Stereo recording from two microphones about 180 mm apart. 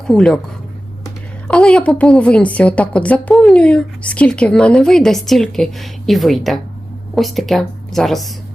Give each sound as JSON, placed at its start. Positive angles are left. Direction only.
{"t": 0.1, "sound": "a woman's voice", "side_deg": 0}
{"t": 1.5, "sound": "a woman's voice", "side_deg": 5}